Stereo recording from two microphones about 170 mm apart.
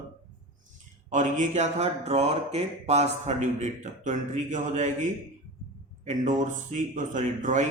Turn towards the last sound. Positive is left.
turn(degrees=-45)  # may be behind; listen again after turning